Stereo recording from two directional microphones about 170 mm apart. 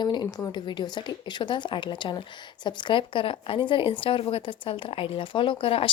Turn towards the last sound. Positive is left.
turn(degrees=30)  # may be behind; listen again after turning